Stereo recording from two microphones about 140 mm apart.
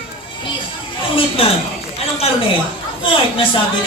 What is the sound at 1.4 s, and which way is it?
Speech, 40° left (ahead or behind).